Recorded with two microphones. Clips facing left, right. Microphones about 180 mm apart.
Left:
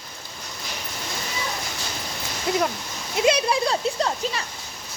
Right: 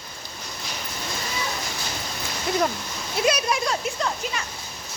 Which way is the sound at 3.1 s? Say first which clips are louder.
Left 3 dB; 25° left (ahead or behind).